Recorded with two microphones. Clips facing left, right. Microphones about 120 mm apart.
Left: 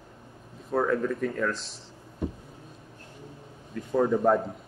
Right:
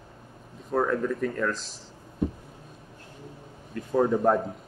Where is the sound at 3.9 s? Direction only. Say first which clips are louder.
Even; 5° right (ahead or behind).